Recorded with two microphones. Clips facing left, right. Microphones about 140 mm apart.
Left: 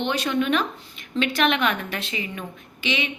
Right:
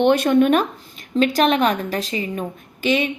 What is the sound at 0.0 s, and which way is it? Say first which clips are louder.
A woman's voice: right 9 dB; 50° right (ahead or behind).